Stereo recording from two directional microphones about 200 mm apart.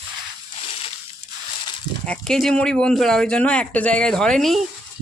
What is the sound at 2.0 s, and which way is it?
Speech, 5° left (ahead or behind).